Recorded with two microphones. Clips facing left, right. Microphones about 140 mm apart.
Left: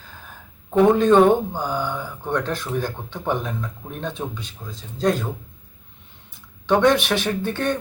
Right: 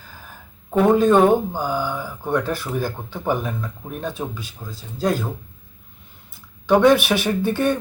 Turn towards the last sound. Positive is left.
turn(degrees=-10)  # may be behind; listen again after turning